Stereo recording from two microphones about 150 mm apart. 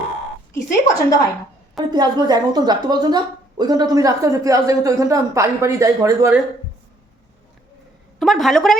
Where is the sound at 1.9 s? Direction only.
25° right (ahead or behind).